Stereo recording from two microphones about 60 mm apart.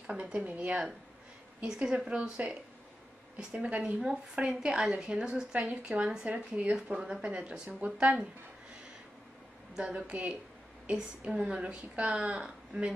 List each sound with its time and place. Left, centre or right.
0.0 s a woman's voice: centre
6.7 s a woman's voice: centre
9.8 s a woman's voice: centre